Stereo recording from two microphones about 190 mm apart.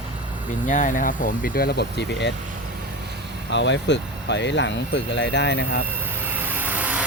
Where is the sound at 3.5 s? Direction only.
70° left (ahead or behind).